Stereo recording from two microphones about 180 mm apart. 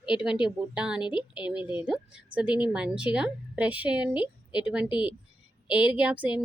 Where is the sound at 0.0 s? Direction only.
5° right (ahead or behind).